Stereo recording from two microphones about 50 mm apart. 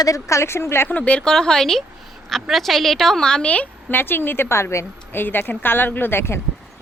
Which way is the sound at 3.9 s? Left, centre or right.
Left.